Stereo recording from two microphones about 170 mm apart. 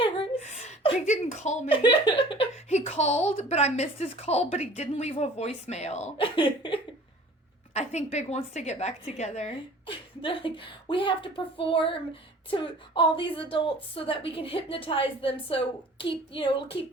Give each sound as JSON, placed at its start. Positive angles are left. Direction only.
{"t": 0.0, "sound": "a sound", "side_deg": 35}
{"t": 1.7, "sound": "a woman's voice", "side_deg": 30}
{"t": 7.7, "sound": "a woman's voice", "side_deg": 40}